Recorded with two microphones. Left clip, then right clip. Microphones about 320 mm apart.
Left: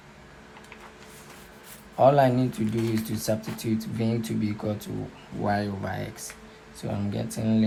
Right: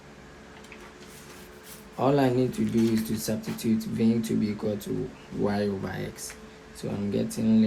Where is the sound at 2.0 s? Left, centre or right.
Left.